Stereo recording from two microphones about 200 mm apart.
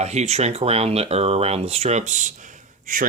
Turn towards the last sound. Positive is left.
turn(degrees=-40)  # may be behind; listen again after turning